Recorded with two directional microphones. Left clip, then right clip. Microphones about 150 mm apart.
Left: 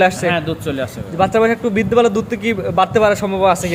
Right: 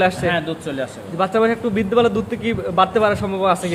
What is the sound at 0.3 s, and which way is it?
Speech, 50° left (ahead or behind).